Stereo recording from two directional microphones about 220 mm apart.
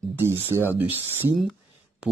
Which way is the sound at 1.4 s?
Centre (ahead or behind).